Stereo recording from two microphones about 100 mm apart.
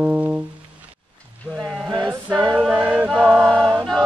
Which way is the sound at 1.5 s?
10° right (ahead or behind).